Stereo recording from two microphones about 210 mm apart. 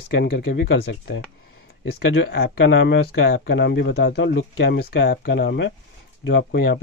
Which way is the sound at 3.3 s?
50° left (ahead or behind).